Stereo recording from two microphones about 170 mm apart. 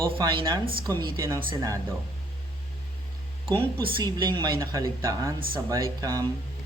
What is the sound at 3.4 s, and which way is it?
A man's voice, 30° right (ahead or behind).